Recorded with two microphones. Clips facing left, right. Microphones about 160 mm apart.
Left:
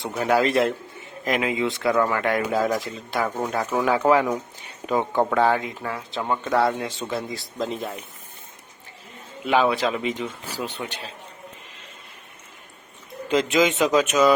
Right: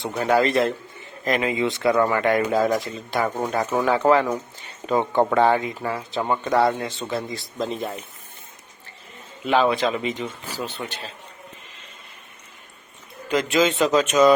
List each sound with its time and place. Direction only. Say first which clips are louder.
0.0 s speech: right 1 dB; 5° left (ahead or behind)
3.8 s speech: right 1 dB; 10° left (ahead or behind)
9.4 s speech: right 1 dB; 10° left (ahead or behind)
13.2 s speech: even; 20° left (ahead or behind)